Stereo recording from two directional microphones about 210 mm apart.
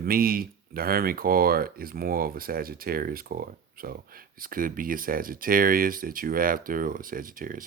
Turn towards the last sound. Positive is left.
turn(degrees=-40)  # may be behind; listen again after turning